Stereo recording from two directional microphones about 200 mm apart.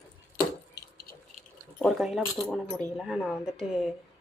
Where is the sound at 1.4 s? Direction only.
Centre (ahead or behind).